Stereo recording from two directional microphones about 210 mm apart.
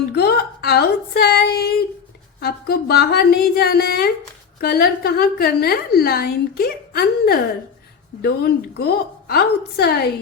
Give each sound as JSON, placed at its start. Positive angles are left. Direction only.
{"t": 0.1, "sound": "a woman's voice", "side_deg": 50}